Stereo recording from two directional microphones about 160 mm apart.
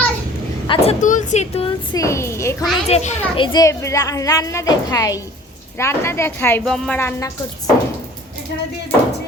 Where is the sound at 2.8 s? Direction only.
40° left (ahead or behind); by 6.6 s 15° left (ahead or behind).